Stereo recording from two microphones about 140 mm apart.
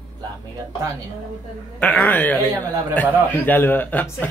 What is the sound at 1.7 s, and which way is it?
Speech, 10° left (ahead or behind).